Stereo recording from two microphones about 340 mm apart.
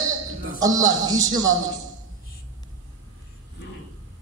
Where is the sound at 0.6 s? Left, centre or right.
Centre.